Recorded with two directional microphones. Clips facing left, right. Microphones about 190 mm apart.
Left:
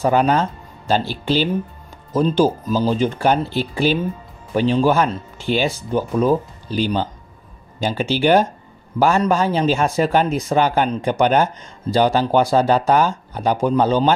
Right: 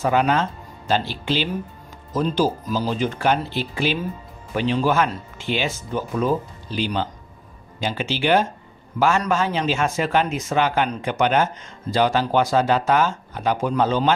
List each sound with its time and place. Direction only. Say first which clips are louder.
0.0 s speech: left 3 dB; 35° left (ahead or behind)